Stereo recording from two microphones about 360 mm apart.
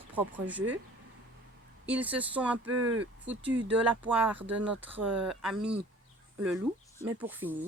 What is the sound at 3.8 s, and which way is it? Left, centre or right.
Speech, centre.